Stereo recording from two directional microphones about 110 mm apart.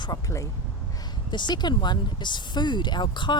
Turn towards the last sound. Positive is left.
turn(degrees=45)  # may be behind; listen again after turning